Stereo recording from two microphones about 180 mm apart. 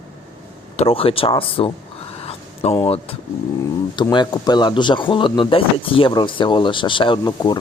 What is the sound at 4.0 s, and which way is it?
Speech, 25° left (ahead or behind).